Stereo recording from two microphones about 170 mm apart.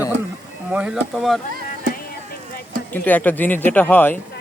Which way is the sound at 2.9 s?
10° left (ahead or behind).